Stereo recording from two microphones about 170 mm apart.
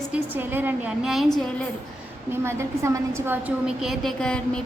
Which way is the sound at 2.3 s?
15° right (ahead or behind).